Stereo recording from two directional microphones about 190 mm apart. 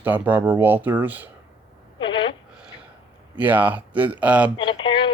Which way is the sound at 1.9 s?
25° left (ahead or behind).